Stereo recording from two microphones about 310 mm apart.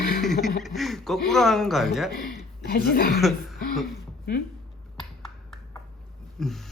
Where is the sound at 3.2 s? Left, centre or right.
Centre.